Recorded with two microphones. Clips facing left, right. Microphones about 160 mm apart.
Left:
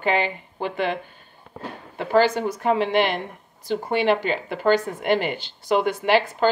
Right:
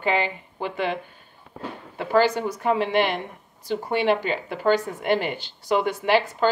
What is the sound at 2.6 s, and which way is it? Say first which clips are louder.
Speech: left 1 dB; 5° right (ahead or behind).